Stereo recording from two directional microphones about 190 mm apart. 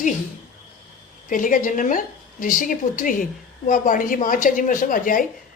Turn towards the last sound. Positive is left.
turn(degrees=45)  # may be behind; listen again after turning